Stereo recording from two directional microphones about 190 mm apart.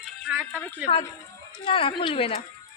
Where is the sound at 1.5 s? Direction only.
25° left (ahead or behind).